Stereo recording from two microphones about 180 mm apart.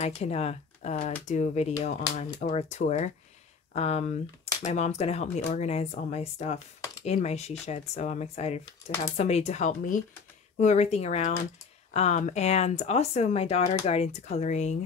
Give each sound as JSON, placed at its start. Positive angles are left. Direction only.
{"t": 0.0, "sound": "speech", "side_deg": 35}